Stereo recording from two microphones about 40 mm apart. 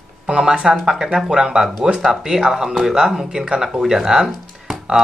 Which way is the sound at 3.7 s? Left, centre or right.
Centre.